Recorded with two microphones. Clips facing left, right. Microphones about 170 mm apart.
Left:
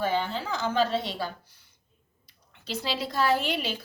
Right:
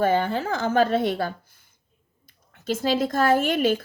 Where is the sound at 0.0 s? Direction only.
50° right (ahead or behind).